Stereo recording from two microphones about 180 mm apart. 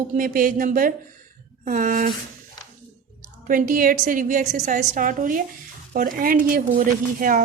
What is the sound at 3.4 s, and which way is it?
A woman's voice, 50° right (ahead or behind).